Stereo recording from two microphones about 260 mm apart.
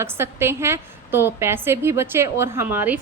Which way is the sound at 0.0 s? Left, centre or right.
Centre.